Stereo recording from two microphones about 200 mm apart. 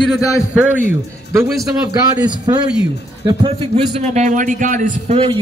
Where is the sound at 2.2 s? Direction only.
20° right (ahead or behind).